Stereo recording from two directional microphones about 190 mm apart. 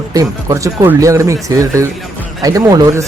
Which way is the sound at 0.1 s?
20° right (ahead or behind).